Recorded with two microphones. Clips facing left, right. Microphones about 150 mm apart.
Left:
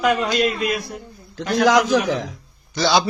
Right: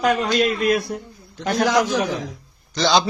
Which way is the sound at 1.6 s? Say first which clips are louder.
Left 3 dB; 90° left.